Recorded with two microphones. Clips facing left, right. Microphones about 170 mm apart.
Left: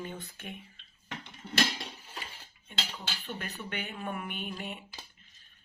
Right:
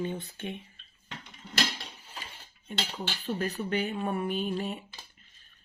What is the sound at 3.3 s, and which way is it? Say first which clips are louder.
Speech: right 11 dB; 35° right (ahead or behind).